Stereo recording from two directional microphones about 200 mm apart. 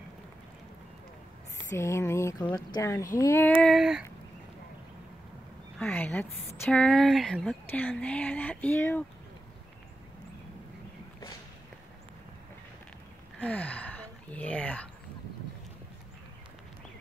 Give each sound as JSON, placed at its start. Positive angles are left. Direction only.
{"t": 1.8, "sound": "speech", "side_deg": 15}
{"t": 3.6, "sound": "a sound", "side_deg": 0}
{"t": 5.8, "sound": "speech", "side_deg": 5}
{"t": 13.4, "sound": "speech", "side_deg": 5}